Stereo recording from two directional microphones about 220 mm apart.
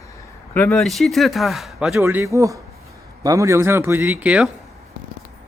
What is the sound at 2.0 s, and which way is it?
Speech, 10° right (ahead or behind).